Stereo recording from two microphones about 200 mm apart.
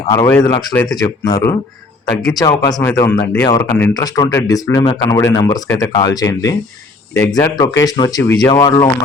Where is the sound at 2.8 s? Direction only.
15° left (ahead or behind).